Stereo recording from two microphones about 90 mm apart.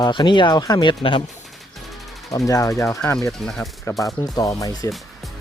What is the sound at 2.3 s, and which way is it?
Speech, 40° left (ahead or behind).